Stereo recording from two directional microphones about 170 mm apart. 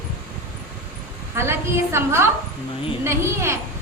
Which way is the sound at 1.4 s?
15° right (ahead or behind).